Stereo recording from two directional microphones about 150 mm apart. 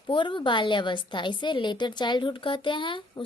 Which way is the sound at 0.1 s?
35° left (ahead or behind).